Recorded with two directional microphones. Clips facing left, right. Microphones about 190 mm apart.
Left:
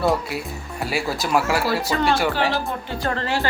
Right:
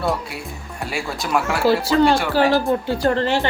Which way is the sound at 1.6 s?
30° right (ahead or behind).